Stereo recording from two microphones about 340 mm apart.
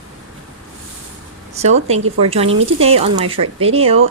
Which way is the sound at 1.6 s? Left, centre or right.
Centre.